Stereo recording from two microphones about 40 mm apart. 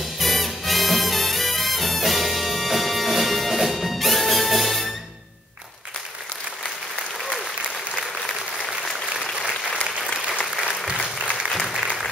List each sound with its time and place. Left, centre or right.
0.0 s music: centre
10.5 s applause: right
11.5 s applause: centre